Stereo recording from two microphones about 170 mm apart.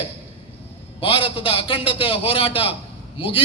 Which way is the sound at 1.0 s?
30° left (ahead or behind).